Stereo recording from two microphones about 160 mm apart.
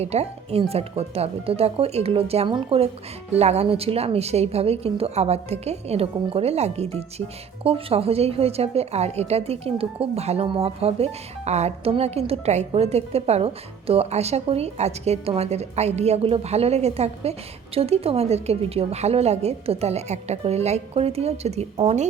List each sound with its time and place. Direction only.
0.0 s a woman's voice: 40° right (ahead or behind)